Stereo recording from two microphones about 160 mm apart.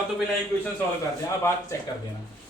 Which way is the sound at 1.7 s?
20° left (ahead or behind).